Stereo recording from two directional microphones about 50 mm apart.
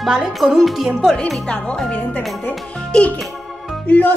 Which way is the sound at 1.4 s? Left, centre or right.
Left.